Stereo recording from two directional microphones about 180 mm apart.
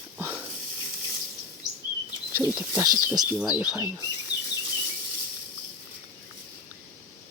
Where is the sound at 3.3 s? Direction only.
10° right (ahead or behind).